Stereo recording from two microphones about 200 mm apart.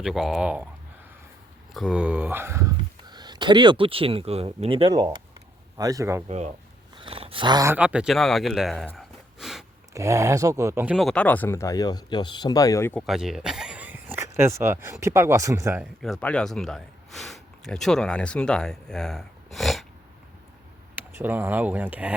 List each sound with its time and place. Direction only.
0.0 s speech: centre (ahead or behind)
1.7 s speech: 5° right (ahead or behind)
6.2 s speech: 35° right (ahead or behind); by 9.6 s centre (ahead or behind)
9.9 s speech: 15° right (ahead or behind)
10.9 s speech: 5° left (ahead or behind); by 15.9 s 10° right (ahead or behind)
16.2 s speech: 5° left (ahead or behind)
20.9 s speech: 10° right (ahead or behind)